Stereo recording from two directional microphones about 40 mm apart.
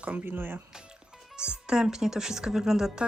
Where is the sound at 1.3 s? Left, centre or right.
Right.